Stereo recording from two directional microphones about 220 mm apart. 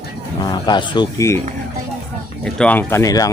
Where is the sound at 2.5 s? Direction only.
5° left (ahead or behind).